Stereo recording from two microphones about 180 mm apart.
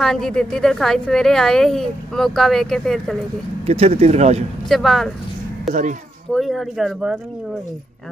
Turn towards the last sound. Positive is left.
turn(degrees=-5)  # may be behind; listen again after turning